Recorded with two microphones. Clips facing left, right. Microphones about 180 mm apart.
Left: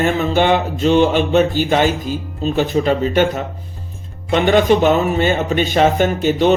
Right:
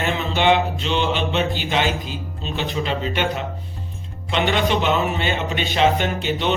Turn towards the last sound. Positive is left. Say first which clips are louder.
# left 8 dB
turn(degrees=45)  # may be behind; listen again after turning